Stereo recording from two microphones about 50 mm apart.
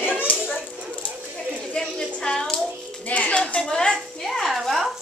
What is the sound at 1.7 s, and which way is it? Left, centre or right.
Speech, centre.